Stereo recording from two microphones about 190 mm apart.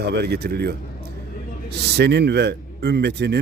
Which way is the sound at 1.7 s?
60° right (ahead or behind).